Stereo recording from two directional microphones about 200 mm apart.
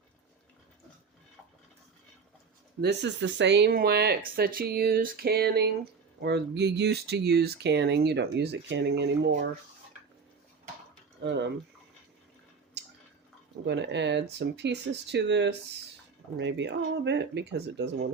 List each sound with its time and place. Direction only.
2.8 s speech: 60° right (ahead or behind)
11.2 s speech: 60° right (ahead or behind)
12.8 s drip: 60° right (ahead or behind)
13.7 s speech: 60° right (ahead or behind)